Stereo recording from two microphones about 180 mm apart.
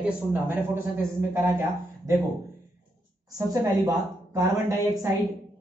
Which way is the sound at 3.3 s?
20° right (ahead or behind).